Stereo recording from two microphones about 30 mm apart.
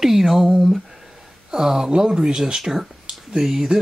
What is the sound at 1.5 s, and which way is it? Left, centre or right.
Speech, centre.